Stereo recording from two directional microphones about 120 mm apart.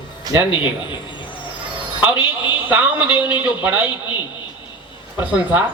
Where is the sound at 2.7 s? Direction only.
15° right (ahead or behind).